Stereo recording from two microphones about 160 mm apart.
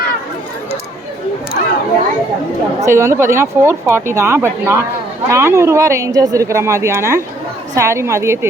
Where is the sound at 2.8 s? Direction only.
15° right (ahead or behind).